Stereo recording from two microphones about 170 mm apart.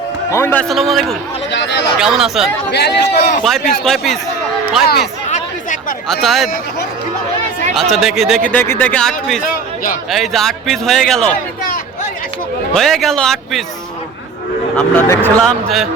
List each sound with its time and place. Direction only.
0.3 s speech: 15° left (ahead or behind)
0.7 s a man's voice: centre (ahead or behind)
1.5 s speech: 90° left
2.0 s a man's voice: centre (ahead or behind)
2.7 s a man's voice: 75° left (ahead or behind)
3.4 s a man's voice: centre (ahead or behind)
6.1 s a man's voice: centre (ahead or behind)
7.8 s a man's voice: centre (ahead or behind)
8.4 s a man's voice: 10° left (ahead or behind)
12.7 s a man's voice: centre (ahead or behind)
14.8 s speech: 15° left (ahead or behind)
15.4 s a man's voice: centre (ahead or behind)